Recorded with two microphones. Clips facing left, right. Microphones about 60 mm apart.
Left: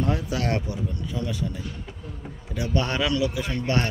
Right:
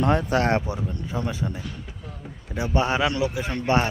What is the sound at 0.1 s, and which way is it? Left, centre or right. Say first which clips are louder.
Speech: right 6 dB; right.